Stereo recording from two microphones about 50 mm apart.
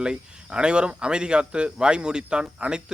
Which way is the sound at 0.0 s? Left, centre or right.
Centre.